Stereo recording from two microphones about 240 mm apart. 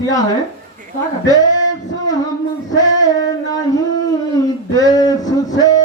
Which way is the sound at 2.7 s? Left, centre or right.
Centre.